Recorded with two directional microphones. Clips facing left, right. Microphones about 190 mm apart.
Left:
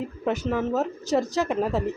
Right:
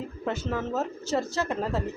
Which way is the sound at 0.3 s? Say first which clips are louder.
Left 5 dB; 15° left (ahead or behind).